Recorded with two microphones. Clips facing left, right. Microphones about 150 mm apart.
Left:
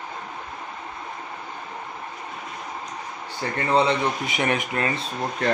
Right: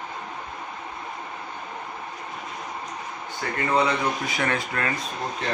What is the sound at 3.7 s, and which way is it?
Speech, 25° left (ahead or behind).